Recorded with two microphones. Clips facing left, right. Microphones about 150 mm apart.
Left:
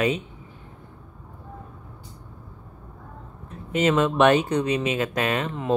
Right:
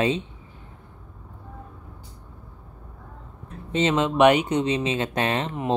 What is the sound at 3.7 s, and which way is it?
Speech, 25° right (ahead or behind).